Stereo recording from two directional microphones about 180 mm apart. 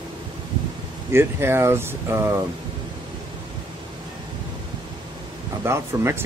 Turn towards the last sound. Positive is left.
turn(degrees=-15)  # may be behind; listen again after turning